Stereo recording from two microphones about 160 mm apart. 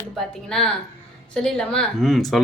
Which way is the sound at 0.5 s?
5° left (ahead or behind).